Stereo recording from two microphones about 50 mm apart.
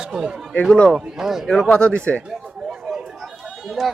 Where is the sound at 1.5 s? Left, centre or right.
Centre.